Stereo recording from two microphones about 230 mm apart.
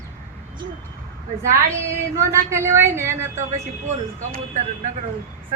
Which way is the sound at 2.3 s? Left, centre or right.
Centre.